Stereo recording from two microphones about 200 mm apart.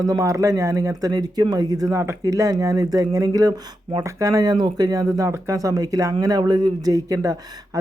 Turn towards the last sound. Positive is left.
turn(degrees=-15)  # may be behind; listen again after turning